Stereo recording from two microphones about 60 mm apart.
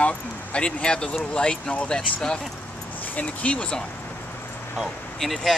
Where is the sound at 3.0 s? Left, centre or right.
Left.